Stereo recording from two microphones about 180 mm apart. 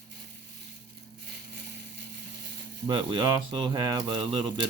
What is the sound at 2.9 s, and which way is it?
Speech, 25° right (ahead or behind).